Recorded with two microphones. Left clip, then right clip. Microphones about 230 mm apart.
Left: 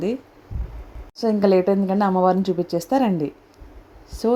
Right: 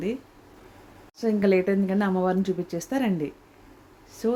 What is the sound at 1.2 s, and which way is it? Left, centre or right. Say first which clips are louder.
Speech: left 5 dB; centre.